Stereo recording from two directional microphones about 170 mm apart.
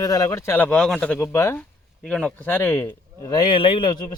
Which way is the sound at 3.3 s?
25° left (ahead or behind).